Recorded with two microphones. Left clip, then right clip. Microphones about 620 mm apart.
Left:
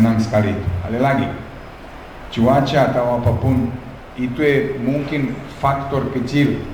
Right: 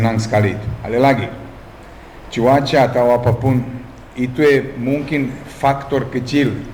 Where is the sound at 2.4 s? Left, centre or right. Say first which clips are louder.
Right 2 dB; right.